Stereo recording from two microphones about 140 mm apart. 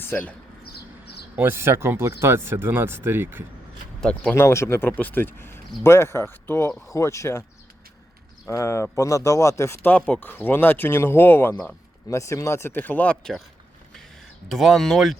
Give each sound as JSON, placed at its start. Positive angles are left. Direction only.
{"t": 0.1, "sound": "speech", "side_deg": 10}
{"t": 1.4, "sound": "speech", "side_deg": -20}
{"t": 4.0, "sound": "speech", "side_deg": 5}
{"t": 4.4, "sound": "speech", "side_deg": 20}
{"t": 8.4, "sound": "speech", "side_deg": 20}
{"t": 14.5, "sound": "speech", "side_deg": 0}